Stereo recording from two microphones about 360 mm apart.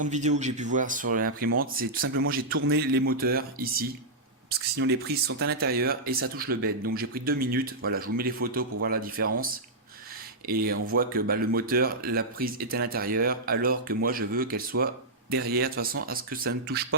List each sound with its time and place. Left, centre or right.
0.0 s speech: centre